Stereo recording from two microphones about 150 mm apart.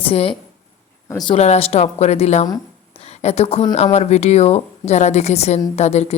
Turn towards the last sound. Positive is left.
turn(degrees=45)  # may be behind; listen again after turning